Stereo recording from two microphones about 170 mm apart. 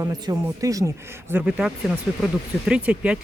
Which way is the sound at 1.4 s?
5° right (ahead or behind).